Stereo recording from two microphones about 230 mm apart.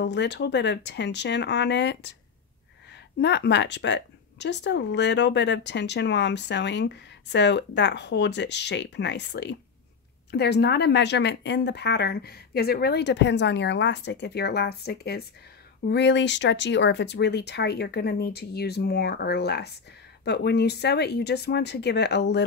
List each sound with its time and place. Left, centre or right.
0.0 s a woman's voice: left